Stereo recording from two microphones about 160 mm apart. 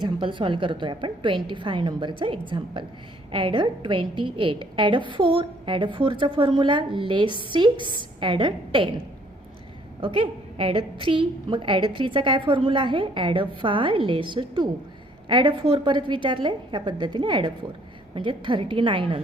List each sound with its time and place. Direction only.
0.0 s a woman's voice: 30° right (ahead or behind)
10.0 s a woman's voice: 35° right (ahead or behind)